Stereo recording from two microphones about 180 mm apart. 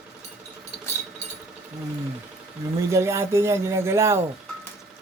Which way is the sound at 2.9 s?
15° right (ahead or behind).